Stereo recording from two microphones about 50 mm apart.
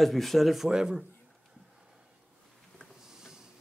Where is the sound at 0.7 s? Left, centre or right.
Centre.